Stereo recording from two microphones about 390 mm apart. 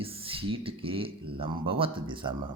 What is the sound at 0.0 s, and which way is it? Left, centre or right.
Speech, centre.